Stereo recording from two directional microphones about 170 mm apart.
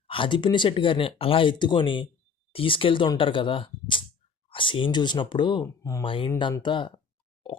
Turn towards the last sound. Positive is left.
turn(degrees=30)  # may be behind; listen again after turning